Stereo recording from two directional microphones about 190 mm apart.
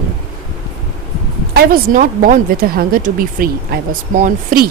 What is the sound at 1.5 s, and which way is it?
Speech, 45° right (ahead or behind).